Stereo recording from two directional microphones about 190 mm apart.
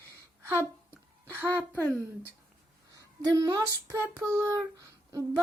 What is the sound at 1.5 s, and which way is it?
Speech, 10° left (ahead or behind).